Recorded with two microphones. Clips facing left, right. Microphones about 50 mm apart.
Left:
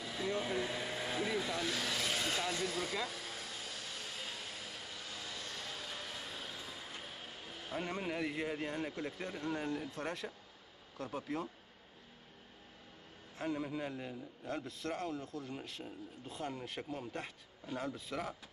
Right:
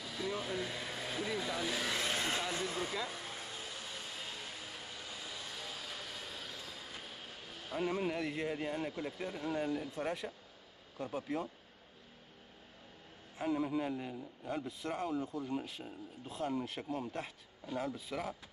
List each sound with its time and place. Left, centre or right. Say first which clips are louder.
0.0 s a sound: left 1 dB; centre
0.4 s speech: left 2 dB; centre
1.5 s speech: even; centre
1.9 s speech: right 1 dB; right
3.1 s vacuum cleaner: right 1 dB; right
5.0 s vehicle: left 1 dB; centre
7.8 s a man's voice: right 4 dB; centre
13.4 s a man's voice: right 4 dB; centre